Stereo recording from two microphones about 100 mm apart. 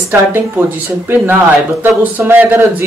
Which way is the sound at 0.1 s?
20° right (ahead or behind).